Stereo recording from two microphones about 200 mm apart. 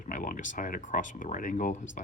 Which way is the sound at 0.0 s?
40° left (ahead or behind).